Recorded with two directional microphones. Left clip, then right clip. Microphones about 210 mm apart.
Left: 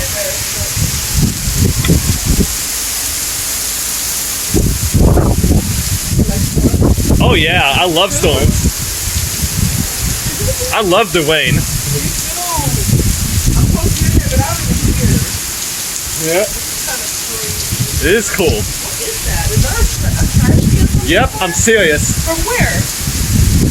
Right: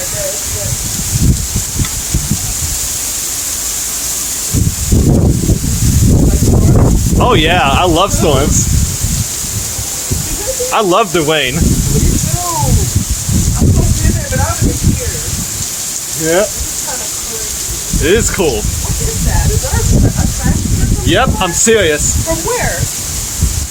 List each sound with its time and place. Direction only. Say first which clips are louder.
7.2 s speech: right 2 dB; 30° right (ahead or behind)
10.7 s speech: right 1 dB; 15° right (ahead or behind)
18.0 s speech: right 1 dB; 10° right (ahead or behind)
21.1 s speech: right 1 dB; 10° right (ahead or behind)